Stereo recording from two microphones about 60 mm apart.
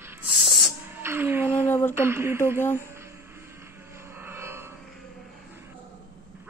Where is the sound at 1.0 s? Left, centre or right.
Right.